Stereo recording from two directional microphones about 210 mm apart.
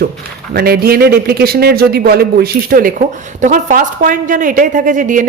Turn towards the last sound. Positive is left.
turn(degrees=-40)  # may be behind; listen again after turning